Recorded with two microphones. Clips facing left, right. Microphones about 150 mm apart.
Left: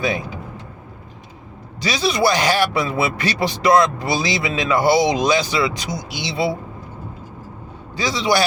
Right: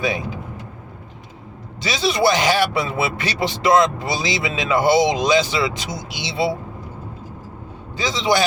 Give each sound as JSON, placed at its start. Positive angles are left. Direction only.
{"t": 1.8, "sound": "speech", "side_deg": -20}
{"t": 7.9, "sound": "speech", "side_deg": -20}